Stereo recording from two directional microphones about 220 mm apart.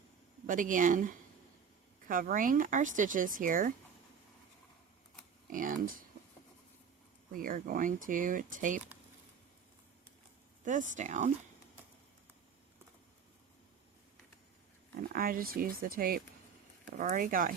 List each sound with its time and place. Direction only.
0.4 s speech: 35° right (ahead or behind)
5.5 s speech: 40° right (ahead or behind)
7.3 s speech: 40° right (ahead or behind)
10.9 s speech: 35° right (ahead or behind)
15.0 s speech: 40° right (ahead or behind)